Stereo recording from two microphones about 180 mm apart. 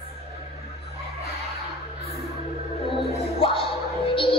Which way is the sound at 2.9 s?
30° left (ahead or behind).